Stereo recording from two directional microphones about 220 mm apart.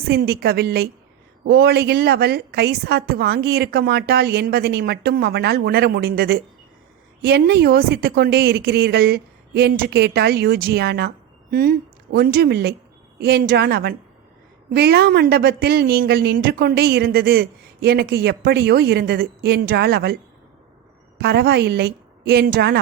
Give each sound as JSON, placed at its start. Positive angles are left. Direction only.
{"t": 0.1, "sound": "speech", "side_deg": -45}
{"t": 21.2, "sound": "speech", "side_deg": -45}